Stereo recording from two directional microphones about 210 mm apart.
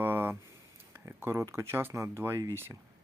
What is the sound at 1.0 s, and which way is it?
Speech, 10° right (ahead or behind).